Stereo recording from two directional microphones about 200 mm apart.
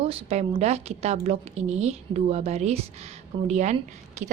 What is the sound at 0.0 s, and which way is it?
A woman's voice, 30° right (ahead or behind).